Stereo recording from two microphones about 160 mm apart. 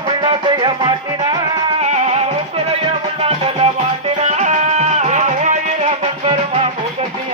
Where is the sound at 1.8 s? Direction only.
45° right (ahead or behind).